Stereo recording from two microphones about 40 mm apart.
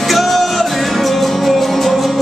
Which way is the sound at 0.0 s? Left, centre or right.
Centre.